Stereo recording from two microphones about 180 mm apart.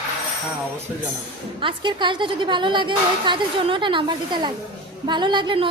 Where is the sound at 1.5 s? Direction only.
25° right (ahead or behind).